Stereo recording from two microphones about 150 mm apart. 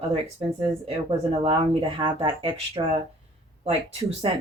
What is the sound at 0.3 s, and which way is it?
Speech, 30° right (ahead or behind).